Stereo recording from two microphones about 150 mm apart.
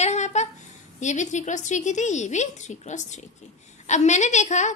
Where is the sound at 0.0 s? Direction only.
50° left (ahead or behind).